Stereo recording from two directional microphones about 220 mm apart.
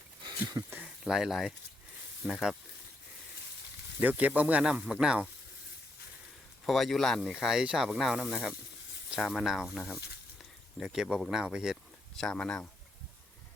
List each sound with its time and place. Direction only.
0.3 s a sound: 20° right (ahead or behind)
0.8 s speech: centre (ahead or behind)
4.0 s speech: 5° right (ahead or behind)
6.7 s speech: centre (ahead or behind)